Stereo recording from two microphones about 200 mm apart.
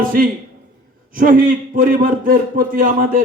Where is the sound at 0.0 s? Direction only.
45° right (ahead or behind).